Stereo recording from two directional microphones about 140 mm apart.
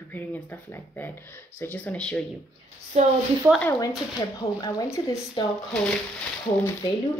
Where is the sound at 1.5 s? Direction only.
15° left (ahead or behind).